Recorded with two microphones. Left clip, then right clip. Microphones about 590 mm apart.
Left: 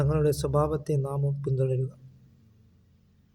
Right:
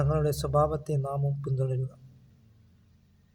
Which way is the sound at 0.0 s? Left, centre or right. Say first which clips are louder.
Left 3 dB; right.